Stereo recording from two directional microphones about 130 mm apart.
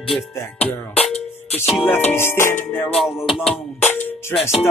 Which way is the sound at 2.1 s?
20° left (ahead or behind).